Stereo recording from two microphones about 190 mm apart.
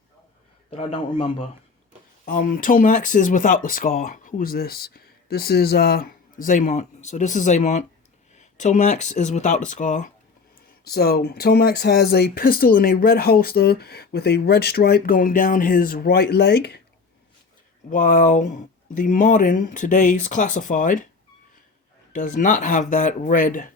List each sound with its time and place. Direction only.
0.7 s a man's voice: 30° left (ahead or behind)
2.2 s speech: 50° left (ahead or behind)
10.8 s speech: 55° left (ahead or behind)
17.9 s speech: 45° left (ahead or behind)
22.1 s speech: 40° left (ahead or behind)